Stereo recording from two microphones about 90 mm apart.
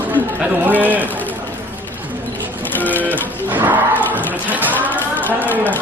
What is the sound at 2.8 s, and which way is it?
Speech, 20° left (ahead or behind).